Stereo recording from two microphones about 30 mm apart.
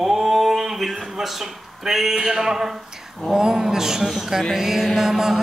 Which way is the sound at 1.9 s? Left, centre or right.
Centre.